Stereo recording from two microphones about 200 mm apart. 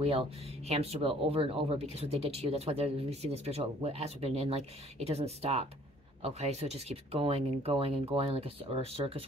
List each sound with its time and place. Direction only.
0.0 s speech: 30° right (ahead or behind)